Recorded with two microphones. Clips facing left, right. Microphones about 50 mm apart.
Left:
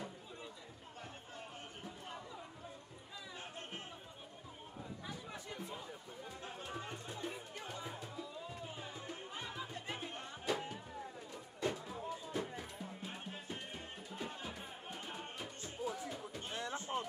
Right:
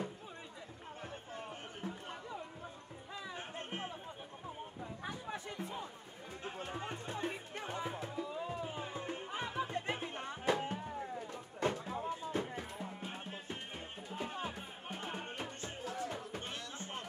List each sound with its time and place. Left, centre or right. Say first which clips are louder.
3.3 s music: right 4 dB; right
5.3 s chatter: right 4 dB; right
6.4 s music: right 5 dB; right
16.5 s music: left 4 dB; left